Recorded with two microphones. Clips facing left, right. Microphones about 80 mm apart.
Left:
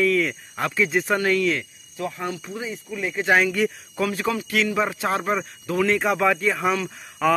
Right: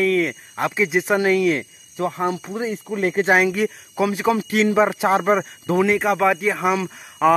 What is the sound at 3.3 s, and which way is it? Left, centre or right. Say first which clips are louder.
Speech: left 1 dB; centre.